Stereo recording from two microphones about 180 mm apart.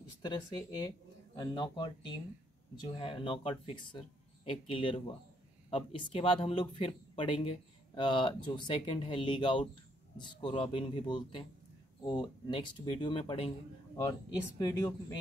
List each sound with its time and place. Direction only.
0.2 s speech: 25° left (ahead or behind)
13.9 s speech: 20° left (ahead or behind)